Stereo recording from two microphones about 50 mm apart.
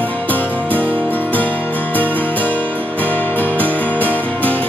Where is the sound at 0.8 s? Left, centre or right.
Right.